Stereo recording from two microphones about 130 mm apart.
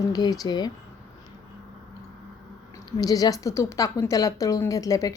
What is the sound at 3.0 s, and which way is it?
A woman's voice, 30° left (ahead or behind).